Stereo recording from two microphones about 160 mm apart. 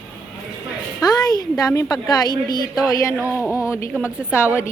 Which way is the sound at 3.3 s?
10° right (ahead or behind).